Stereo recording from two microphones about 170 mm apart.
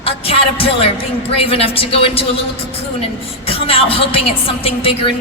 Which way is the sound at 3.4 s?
35° left (ahead or behind).